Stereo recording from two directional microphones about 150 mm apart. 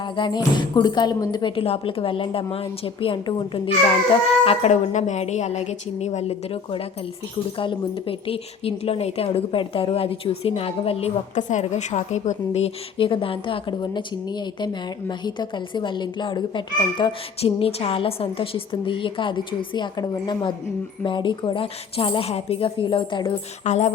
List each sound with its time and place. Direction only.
0.0 s speech: 30° left (ahead or behind)
4.4 s a woman's voice: 50° left (ahead or behind)
23.6 s a woman's voice: 50° left (ahead or behind)